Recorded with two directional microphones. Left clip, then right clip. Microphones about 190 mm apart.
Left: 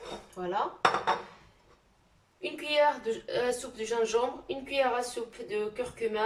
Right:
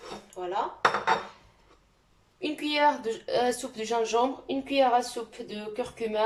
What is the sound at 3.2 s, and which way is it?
A woman's voice, 30° right (ahead or behind).